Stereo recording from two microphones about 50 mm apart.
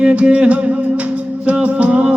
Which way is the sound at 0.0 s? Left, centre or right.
Right.